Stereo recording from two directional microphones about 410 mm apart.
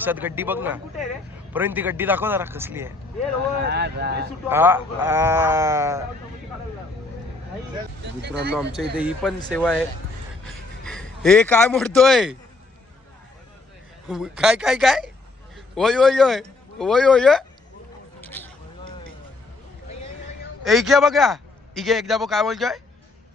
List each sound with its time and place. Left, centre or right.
0.0 s a man's voice: centre
3.6 s speech: right
4.4 s a man's voice: centre
8.9 s a man's voice: centre
10.4 s a sound: centre
14.1 s a man's voice: centre
18.2 s a sound: centre
20.7 s a man's voice: centre